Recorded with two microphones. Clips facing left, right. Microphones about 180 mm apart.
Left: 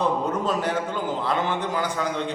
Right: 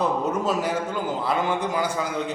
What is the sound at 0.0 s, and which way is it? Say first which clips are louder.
A man's voice: even; 10° right (ahead or behind).